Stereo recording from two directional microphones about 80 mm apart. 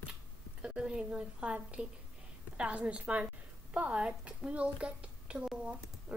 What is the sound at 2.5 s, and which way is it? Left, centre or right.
A woman's voice, centre.